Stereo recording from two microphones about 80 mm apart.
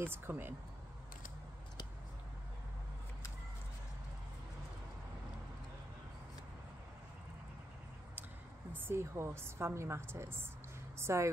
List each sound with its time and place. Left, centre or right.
0.0 s speech: right
8.7 s a woman's voice: right